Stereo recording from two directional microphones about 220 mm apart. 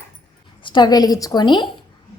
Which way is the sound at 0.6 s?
20° left (ahead or behind).